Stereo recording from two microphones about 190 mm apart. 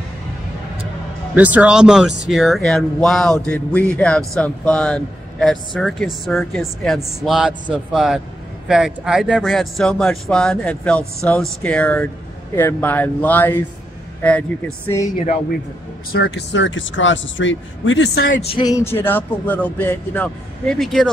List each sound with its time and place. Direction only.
1.3 s a man's voice: 10° right (ahead or behind); by 13.6 s 10° left (ahead or behind)
16.1 s speech: 65° left (ahead or behind)
18.5 s speech: 20° left (ahead or behind); by 21.1 s centre (ahead or behind)